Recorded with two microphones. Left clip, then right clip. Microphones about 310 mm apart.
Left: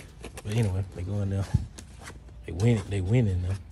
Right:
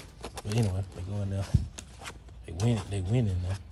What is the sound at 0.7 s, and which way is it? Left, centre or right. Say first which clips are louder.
Speech: left 3 dB; centre.